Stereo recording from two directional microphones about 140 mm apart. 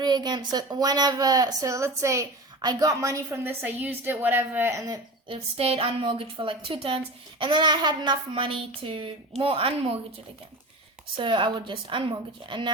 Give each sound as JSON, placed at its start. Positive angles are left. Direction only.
{"t": 0.0, "sound": "a woman's voice", "side_deg": -30}
{"t": 5.3, "sound": "a woman's voice", "side_deg": -45}
{"t": 11.2, "sound": "a woman's voice", "side_deg": -35}